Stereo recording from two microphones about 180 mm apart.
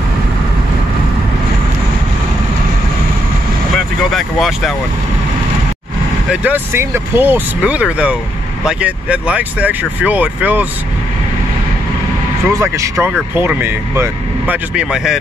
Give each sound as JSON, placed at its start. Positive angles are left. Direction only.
{"t": 4.1, "sound": "speech", "side_deg": 0}
{"t": 6.3, "sound": "speech", "side_deg": -10}
{"t": 12.4, "sound": "speech", "side_deg": -15}